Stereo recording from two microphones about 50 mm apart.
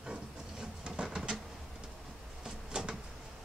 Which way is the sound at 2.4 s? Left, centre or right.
Centre.